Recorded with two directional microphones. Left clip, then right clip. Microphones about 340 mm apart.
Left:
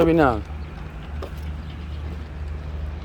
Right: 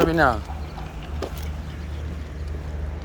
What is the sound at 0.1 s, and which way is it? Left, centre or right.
Speech, left.